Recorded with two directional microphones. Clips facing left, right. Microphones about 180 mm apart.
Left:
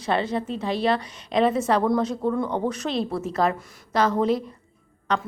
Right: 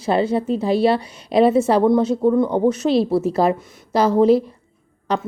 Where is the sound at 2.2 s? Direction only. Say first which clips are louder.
Right 8 dB; 30° right (ahead or behind).